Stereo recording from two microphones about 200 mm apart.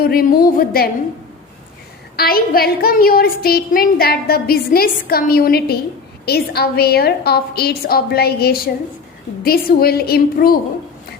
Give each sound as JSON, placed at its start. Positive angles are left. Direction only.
{"t": 0.0, "sound": "a woman's voice", "side_deg": 45}
{"t": 2.1, "sound": "a woman's voice", "side_deg": 50}